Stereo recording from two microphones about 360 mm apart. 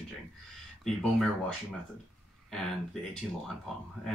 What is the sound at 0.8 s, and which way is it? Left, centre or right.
Speech, centre.